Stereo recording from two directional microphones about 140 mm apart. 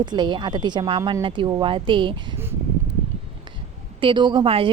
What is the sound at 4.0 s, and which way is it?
Speech, 35° right (ahead or behind).